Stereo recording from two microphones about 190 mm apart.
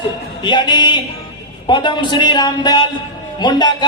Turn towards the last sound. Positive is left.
turn(degrees=20)  # may be behind; listen again after turning